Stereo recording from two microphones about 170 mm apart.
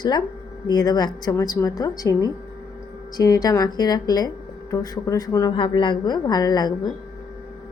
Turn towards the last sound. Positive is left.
turn(degrees=25)  # may be behind; listen again after turning